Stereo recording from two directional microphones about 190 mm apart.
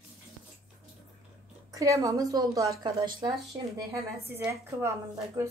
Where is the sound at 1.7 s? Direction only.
15° right (ahead or behind).